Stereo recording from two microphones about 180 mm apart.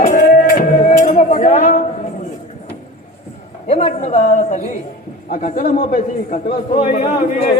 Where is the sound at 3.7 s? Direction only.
40° left (ahead or behind).